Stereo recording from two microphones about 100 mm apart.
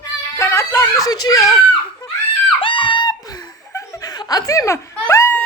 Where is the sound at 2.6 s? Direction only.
60° left (ahead or behind); by 4.9 s 30° left (ahead or behind).